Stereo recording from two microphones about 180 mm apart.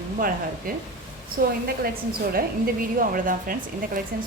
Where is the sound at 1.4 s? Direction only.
55° right (ahead or behind).